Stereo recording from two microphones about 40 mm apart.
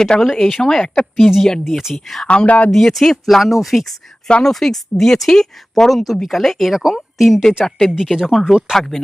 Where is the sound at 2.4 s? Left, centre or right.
Left.